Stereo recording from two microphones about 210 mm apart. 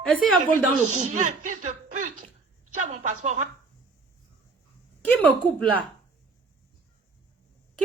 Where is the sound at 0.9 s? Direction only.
35° right (ahead or behind).